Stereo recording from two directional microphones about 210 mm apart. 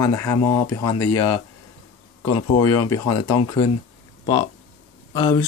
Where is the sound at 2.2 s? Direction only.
90° left.